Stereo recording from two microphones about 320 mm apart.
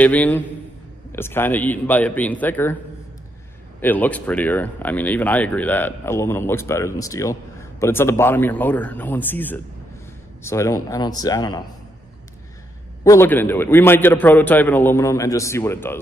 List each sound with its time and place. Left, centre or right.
0.0 s speech: centre
3.8 s a man's voice: centre
13.0 s a man's voice: centre